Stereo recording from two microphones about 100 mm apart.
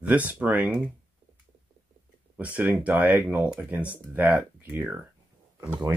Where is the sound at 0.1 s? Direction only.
15° right (ahead or behind).